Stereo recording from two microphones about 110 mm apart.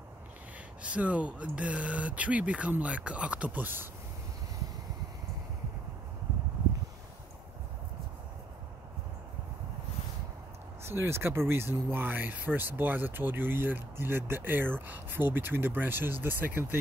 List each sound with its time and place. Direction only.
0.8 s speech: 10° right (ahead or behind)
10.8 s speech: 25° right (ahead or behind)